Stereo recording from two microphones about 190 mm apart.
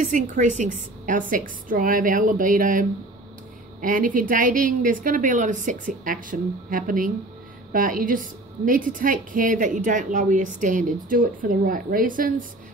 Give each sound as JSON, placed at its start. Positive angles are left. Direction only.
{"t": 0.0, "sound": "a woman's voice", "side_deg": -40}